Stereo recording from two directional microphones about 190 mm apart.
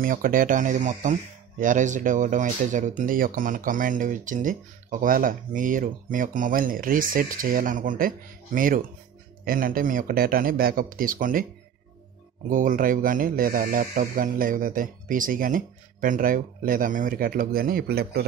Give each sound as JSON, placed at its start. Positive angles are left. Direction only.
{"t": 0.0, "sound": "speech", "side_deg": -45}
{"t": 12.4, "sound": "speech", "side_deg": -45}